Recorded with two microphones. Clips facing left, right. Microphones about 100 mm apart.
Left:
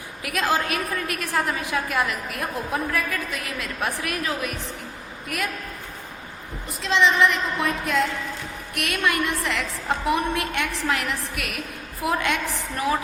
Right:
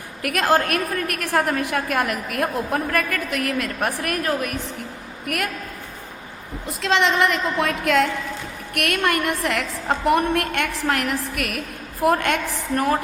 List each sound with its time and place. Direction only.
0.2 s a woman's voice: 60° right (ahead or behind)
6.8 s a woman's voice: 65° right (ahead or behind)
8.7 s a woman's voice: 60° right (ahead or behind)